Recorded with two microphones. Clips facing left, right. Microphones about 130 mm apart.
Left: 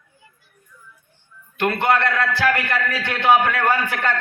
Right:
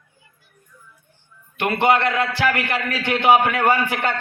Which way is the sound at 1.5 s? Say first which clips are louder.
Right 1 dB; 20° right (ahead or behind).